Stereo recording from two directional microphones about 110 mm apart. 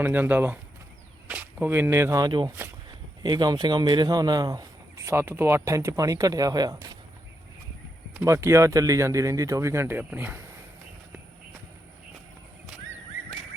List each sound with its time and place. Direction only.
0.0 s speech: 15° right (ahead or behind)
2.2 s speech: 45° right (ahead or behind)
8.1 s speech: 25° right (ahead or behind)